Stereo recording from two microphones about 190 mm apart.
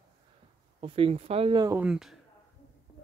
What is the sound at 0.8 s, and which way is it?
Speech, 30° right (ahead or behind).